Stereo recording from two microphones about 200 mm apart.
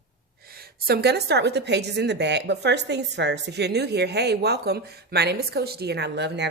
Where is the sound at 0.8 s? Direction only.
55° right (ahead or behind).